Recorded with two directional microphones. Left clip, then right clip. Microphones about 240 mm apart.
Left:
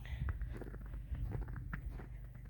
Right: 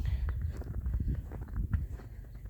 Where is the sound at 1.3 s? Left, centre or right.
Left.